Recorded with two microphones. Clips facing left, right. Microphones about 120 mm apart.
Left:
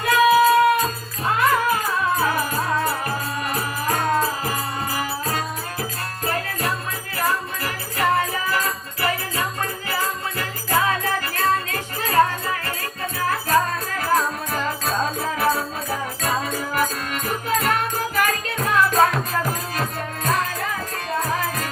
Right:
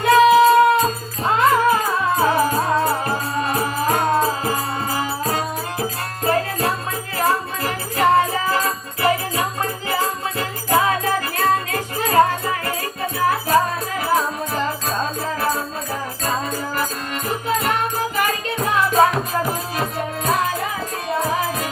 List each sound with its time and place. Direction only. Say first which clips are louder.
0.0 s music: right 4 dB; 25° right (ahead or behind)
14.5 s music: right 1 dB; centre (ahead or behind)